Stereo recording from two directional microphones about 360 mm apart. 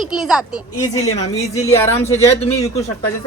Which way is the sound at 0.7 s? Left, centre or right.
Centre.